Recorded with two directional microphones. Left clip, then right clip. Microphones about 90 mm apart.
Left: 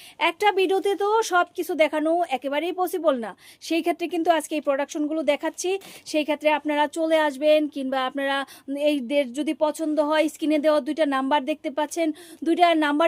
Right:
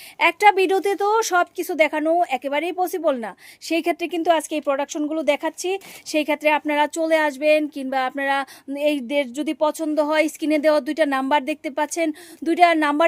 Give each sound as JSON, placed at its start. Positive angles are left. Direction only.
{"t": 0.2, "sound": "speech", "side_deg": -40}
{"t": 6.1, "sound": "speech", "side_deg": -40}